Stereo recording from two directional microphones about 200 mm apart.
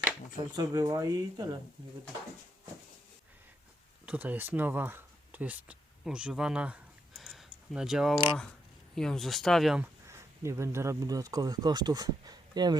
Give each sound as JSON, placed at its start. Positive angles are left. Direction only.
{"t": 0.5, "sound": "speech", "side_deg": -20}
{"t": 4.0, "sound": "speech", "side_deg": -10}